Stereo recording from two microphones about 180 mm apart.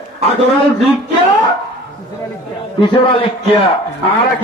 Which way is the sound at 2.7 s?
30° left (ahead or behind).